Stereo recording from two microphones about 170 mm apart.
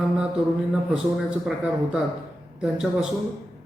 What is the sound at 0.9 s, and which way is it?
A man's voice, 5° right (ahead or behind).